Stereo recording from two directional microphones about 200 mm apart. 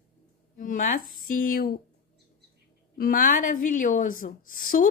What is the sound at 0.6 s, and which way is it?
A woman's voice, 40° left (ahead or behind).